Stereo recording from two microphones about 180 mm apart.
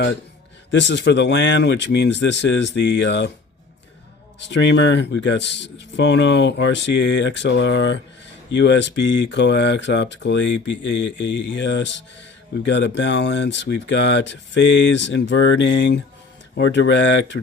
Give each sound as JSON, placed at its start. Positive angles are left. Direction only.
{"t": 0.7, "sound": "speech", "side_deg": 75}
{"t": 4.4, "sound": "speech", "side_deg": 75}